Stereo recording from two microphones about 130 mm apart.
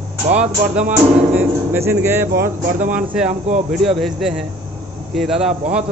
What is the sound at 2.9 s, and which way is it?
A man's voice, 5° right (ahead or behind).